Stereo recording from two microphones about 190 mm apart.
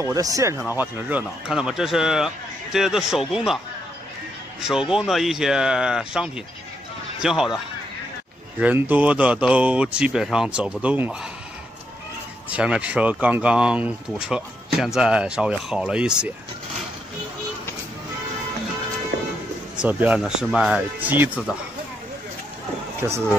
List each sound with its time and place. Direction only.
0.1 s speech: 15° right (ahead or behind); by 3.5 s centre (ahead or behind)
4.6 s speech: centre (ahead or behind)
12.4 s speech: 5° right (ahead or behind)
19.8 s speech: 10° right (ahead or behind)